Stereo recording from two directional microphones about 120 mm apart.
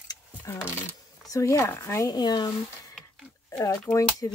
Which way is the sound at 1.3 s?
25° left (ahead or behind).